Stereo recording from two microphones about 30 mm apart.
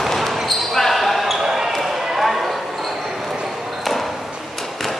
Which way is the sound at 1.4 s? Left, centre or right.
Centre.